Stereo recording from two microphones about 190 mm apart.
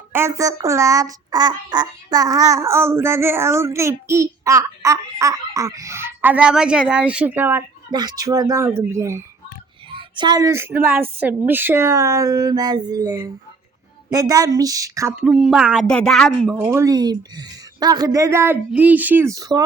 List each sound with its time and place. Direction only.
0.1 s speech: 15° right (ahead or behind)
7.9 s speech: 20° right (ahead or behind)
9.9 s speech: 25° right (ahead or behind)
15.1 s speech: 5° right (ahead or behind)
16.6 s speech: 15° right (ahead or behind)